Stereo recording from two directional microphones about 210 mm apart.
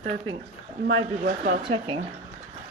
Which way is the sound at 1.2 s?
45° right (ahead or behind).